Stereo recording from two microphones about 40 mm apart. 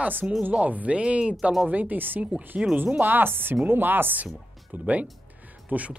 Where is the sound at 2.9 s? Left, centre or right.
Right.